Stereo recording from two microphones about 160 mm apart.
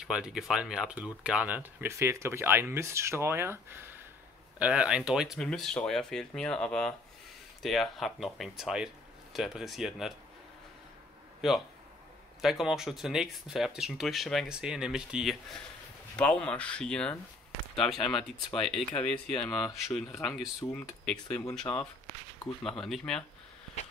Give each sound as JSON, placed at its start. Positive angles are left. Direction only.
{"t": 0.0, "sound": "speech", "side_deg": -5}
{"t": 12.4, "sound": "speech", "side_deg": 0}
{"t": 16.2, "sound": "speech", "side_deg": 10}
{"t": 21.7, "sound": "speech", "side_deg": 20}
{"t": 22.4, "sound": "speech", "side_deg": 5}